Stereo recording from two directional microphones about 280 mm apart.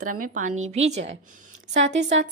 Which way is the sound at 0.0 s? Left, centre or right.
Right.